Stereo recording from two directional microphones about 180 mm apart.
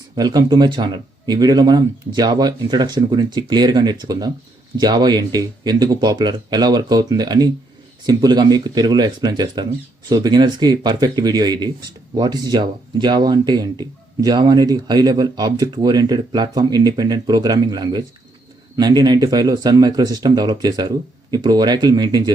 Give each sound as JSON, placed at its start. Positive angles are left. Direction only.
{"t": 0.2, "sound": "speech", "side_deg": -20}